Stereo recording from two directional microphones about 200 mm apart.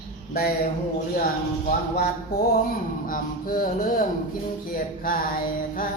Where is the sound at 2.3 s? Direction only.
50° left (ahead or behind).